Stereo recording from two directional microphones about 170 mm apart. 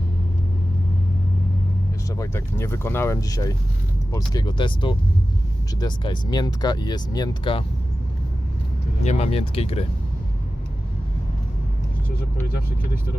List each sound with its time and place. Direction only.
2.0 s speech: 20° left (ahead or behind)
9.0 s speech: 40° left (ahead or behind)